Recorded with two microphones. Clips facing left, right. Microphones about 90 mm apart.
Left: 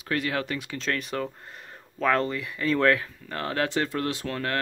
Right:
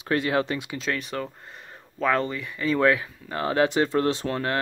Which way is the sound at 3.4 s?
20° right (ahead or behind).